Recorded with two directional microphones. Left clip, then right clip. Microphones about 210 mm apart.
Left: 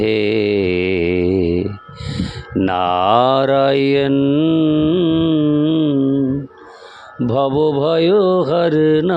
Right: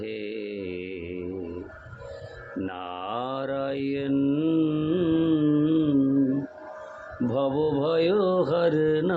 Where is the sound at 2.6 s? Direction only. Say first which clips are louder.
Left 18 dB; 55° left (ahead or behind).